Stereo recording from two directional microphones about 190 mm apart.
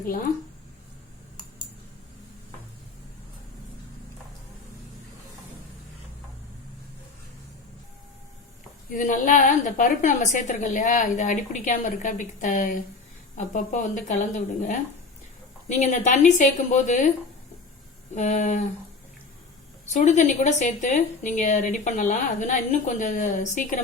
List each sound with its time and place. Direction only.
8.9 s a woman's voice: 45° left (ahead or behind)
18.1 s a woman's voice: 40° left (ahead or behind)
19.9 s a woman's voice: 40° left (ahead or behind)